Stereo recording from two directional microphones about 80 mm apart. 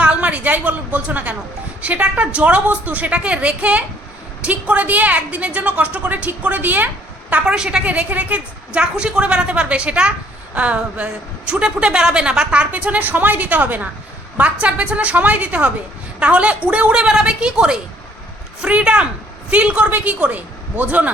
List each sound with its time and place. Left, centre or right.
0.0 s a woman's voice: centre